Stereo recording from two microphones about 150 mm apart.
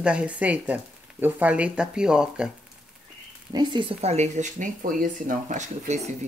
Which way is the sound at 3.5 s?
35° right (ahead or behind).